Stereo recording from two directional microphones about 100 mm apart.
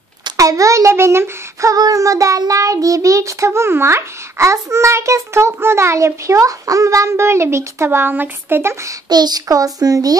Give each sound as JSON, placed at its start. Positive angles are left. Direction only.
{"t": 0.4, "sound": "child singing", "side_deg": -35}
{"t": 9.1, "sound": "child singing", "side_deg": -40}